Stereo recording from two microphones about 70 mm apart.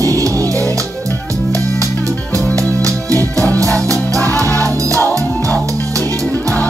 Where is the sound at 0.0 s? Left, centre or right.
Right.